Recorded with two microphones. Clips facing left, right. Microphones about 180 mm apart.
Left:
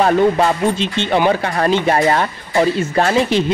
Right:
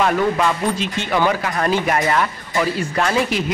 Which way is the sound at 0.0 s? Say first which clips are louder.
Left 4 dB; 35° left (ahead or behind).